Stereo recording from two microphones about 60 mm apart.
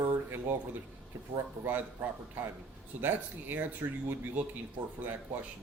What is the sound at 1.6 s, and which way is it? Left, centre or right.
Speech, right.